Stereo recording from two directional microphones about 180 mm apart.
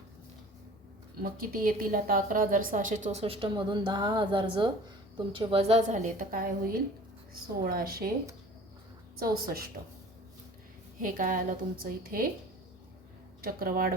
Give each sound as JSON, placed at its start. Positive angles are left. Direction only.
{"t": 1.2, "sound": "a woman's voice", "side_deg": -55}
{"t": 9.1, "sound": "a woman's voice", "side_deg": -55}
{"t": 11.0, "sound": "a woman's voice", "side_deg": -50}
{"t": 13.4, "sound": "a woman's voice", "side_deg": -55}